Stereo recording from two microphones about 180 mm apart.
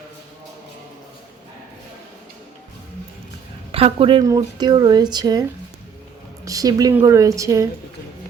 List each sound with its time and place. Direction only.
3.7 s a woman's voice: 30° right (ahead or behind)
6.4 s a sound: 20° right (ahead or behind)
6.9 s a woman's voice: 15° right (ahead or behind)